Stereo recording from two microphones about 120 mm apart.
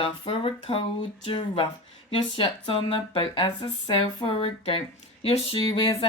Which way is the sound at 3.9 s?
50° left (ahead or behind).